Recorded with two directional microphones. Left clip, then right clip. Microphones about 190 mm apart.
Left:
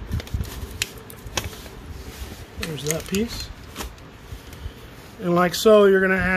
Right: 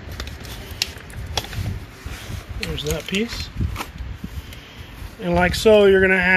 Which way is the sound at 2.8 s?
10° left (ahead or behind).